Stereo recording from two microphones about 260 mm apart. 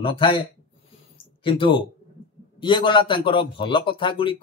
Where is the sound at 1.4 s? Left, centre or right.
Centre.